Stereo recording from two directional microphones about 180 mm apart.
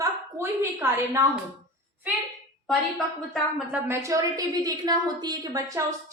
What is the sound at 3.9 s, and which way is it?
A woman's voice, 15° right (ahead or behind).